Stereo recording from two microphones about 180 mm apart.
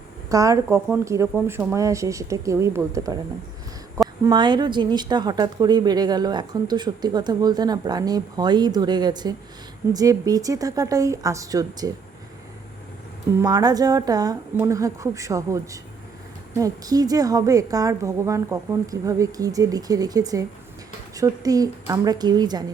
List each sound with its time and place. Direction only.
0.3 s speech: 20° right (ahead or behind)
4.2 s a woman's voice: 25° right (ahead or behind)
13.4 s a woman's voice: 20° right (ahead or behind)